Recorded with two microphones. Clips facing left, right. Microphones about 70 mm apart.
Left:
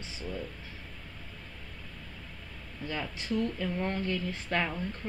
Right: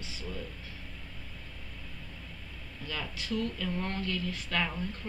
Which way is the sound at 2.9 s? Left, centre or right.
Left.